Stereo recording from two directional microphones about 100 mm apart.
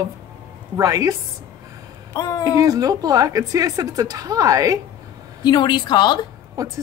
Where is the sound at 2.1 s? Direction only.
40° left (ahead or behind).